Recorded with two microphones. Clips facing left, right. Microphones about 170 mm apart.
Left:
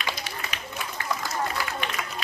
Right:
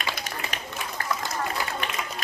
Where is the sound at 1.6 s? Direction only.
20° right (ahead or behind).